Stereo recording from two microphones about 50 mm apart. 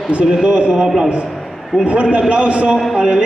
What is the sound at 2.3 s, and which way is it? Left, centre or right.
Speech, right.